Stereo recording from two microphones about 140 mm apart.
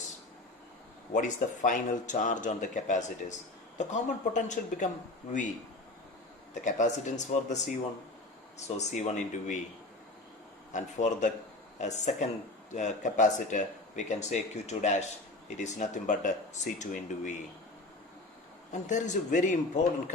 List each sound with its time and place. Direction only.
1.1 s speech: 65° left (ahead or behind)
6.5 s speech: 60° left (ahead or behind)
8.5 s speech: 55° left (ahead or behind)
10.7 s speech: 60° left (ahead or behind)
18.7 s speech: 60° left (ahead or behind)